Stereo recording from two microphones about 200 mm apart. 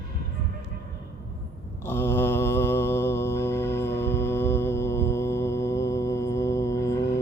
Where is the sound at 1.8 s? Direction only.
10° left (ahead or behind).